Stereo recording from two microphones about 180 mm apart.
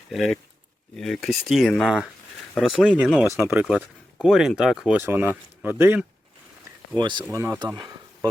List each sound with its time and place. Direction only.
0.1 s speech: centre (ahead or behind)
7.0 s speech: 25° right (ahead or behind)
7.3 s speech: 10° right (ahead or behind)